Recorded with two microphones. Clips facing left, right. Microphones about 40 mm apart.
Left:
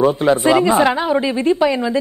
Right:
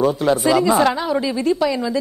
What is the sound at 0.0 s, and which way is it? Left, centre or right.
Speech, left.